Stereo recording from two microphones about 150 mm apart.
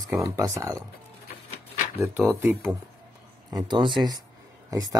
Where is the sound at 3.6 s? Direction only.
30° right (ahead or behind).